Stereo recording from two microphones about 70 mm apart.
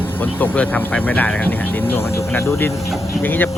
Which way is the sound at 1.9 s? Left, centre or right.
Left.